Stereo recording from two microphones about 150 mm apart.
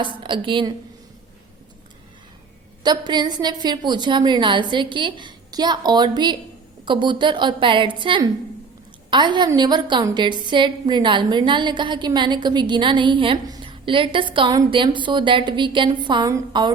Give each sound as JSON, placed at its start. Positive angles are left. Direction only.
{"t": 0.0, "sound": "a woman's voice", "side_deg": -35}
{"t": 2.8, "sound": "a woman's voice", "side_deg": -30}